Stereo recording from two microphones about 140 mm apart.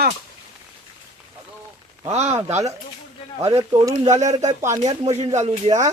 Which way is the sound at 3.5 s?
25° right (ahead or behind).